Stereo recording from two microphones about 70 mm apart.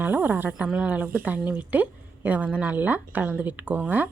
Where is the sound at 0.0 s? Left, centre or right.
Right.